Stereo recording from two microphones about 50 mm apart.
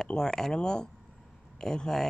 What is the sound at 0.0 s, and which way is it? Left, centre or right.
Speech, centre.